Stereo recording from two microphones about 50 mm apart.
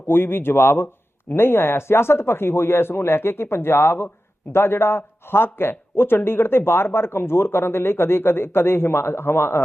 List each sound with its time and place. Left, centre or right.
0.1 s speech: left